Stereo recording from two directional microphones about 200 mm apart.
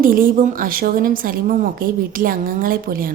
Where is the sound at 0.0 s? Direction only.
45° right (ahead or behind).